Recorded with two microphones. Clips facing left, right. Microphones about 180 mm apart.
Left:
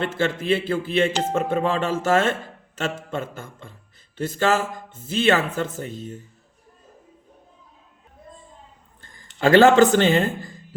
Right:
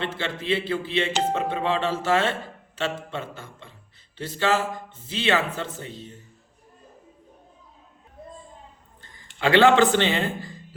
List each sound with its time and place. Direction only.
0.0 s speech: 45° left (ahead or behind)
9.0 s speech: 45° left (ahead or behind)